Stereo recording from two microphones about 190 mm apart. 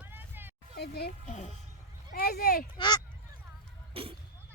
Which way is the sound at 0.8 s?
55° left (ahead or behind).